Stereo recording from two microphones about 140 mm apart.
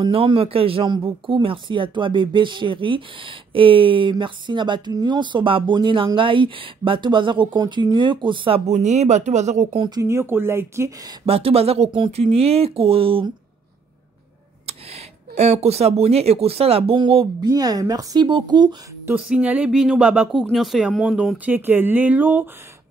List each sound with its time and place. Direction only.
0.0 s speech: 40° right (ahead or behind)
9.8 s speech: 30° right (ahead or behind)
11.2 s speech: 45° right (ahead or behind)
14.7 s speech: 45° right (ahead or behind)
17.4 s speech: 25° right (ahead or behind)
19.0 s speech: 5° right (ahead or behind)
21.5 s speech: 15° right (ahead or behind)